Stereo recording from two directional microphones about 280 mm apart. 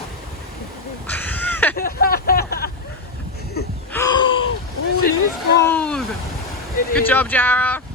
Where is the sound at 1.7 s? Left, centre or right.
Left.